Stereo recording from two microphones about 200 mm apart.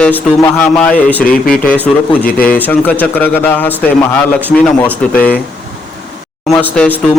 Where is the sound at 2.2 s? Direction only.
45° left (ahead or behind).